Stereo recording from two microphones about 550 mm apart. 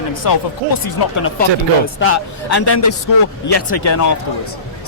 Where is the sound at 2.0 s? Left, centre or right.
Left.